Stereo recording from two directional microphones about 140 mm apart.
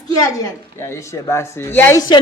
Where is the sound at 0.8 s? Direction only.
20° left (ahead or behind).